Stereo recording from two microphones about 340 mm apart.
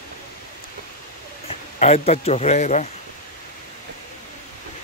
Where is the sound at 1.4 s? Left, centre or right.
Centre.